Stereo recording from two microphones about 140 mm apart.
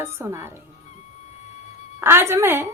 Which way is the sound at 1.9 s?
20° right (ahead or behind).